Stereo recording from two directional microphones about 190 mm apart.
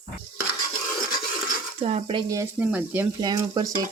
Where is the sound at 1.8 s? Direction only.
30° right (ahead or behind); by 3.1 s 10° right (ahead or behind).